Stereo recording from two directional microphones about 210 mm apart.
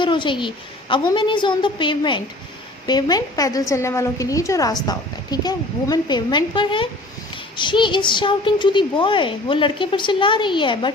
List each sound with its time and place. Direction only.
0.0 s a woman's voice: 25° left (ahead or behind)